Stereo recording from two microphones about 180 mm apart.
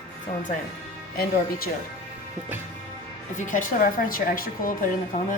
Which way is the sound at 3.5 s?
45° left (ahead or behind).